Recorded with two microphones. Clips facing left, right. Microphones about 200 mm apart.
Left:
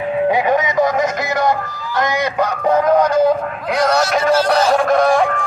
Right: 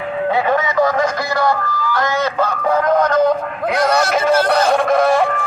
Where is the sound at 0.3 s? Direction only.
15° left (ahead or behind).